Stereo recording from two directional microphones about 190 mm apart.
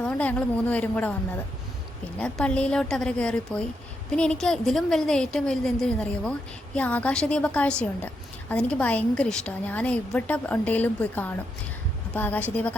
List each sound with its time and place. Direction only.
0.0 s a woman's voice: 5° left (ahead or behind)
2.1 s a woman's voice: 5° left (ahead or behind)